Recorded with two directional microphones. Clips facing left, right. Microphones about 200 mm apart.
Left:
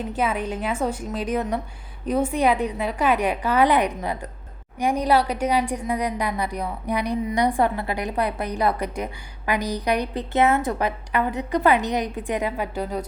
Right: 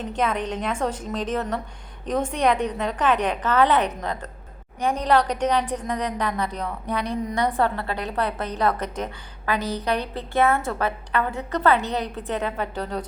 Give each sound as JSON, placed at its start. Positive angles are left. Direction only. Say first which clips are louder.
{"t": 0.0, "sound": "a woman's voice", "louder": "even", "side_deg": 10}